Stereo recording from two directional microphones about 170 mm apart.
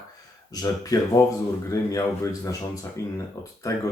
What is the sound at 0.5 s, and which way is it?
Speech, 20° left (ahead or behind).